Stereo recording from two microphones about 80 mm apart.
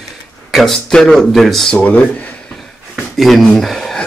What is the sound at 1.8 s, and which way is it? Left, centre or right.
Speech, centre.